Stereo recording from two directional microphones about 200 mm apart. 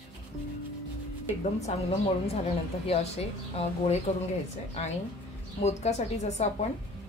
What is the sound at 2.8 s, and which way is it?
Speech, 30° left (ahead or behind).